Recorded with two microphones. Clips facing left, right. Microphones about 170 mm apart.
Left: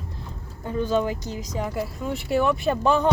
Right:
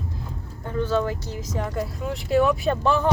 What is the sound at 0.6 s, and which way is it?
Speech, 15° left (ahead or behind).